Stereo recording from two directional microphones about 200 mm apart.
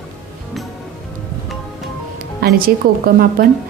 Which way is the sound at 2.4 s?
45° right (ahead or behind).